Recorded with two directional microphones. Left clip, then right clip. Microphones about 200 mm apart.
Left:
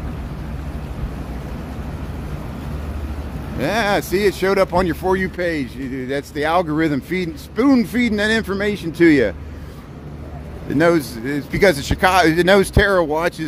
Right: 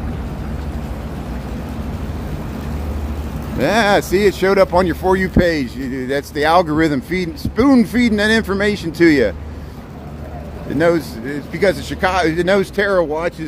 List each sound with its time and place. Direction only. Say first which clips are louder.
3.5 s speech: right 5 dB; centre (ahead or behind); by 9.3 s 15° left (ahead or behind)
10.8 s speech: even; 30° left (ahead or behind)